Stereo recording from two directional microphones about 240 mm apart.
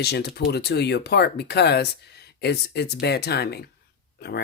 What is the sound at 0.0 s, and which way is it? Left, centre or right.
Speech, left.